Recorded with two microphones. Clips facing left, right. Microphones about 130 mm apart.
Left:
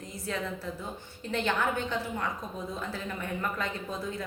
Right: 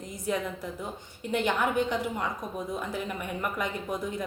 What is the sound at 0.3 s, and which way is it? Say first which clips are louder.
A woman's voice: right 3 dB; 15° right (ahead or behind).